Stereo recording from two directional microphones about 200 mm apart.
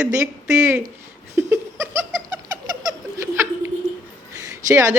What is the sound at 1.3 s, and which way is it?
Giggle, 15° right (ahead or behind).